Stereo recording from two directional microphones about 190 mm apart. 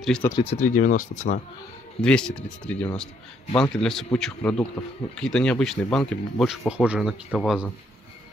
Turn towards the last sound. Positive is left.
turn(degrees=0)  # may be behind; listen again after turning